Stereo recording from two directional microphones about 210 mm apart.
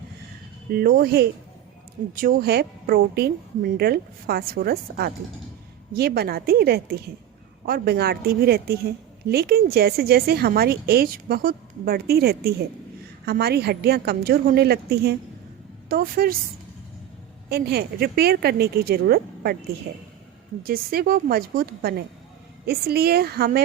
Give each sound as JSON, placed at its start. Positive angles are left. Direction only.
{"t": 0.7, "sound": "a woman's voice", "side_deg": -45}
{"t": 17.5, "sound": "a woman's voice", "side_deg": -50}